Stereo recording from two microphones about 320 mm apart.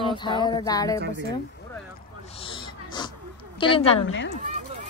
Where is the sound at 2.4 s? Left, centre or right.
Centre.